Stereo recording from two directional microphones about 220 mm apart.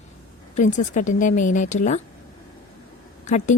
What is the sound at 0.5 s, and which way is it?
A woman's voice, 35° left (ahead or behind).